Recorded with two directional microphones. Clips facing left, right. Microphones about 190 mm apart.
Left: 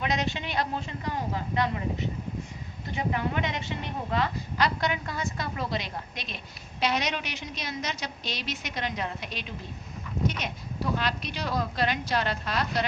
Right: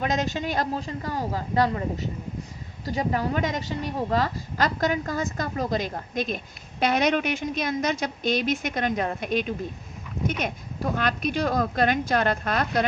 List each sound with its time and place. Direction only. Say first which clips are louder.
0.0 s a woman's voice: right 4 dB; 45° right (ahead or behind)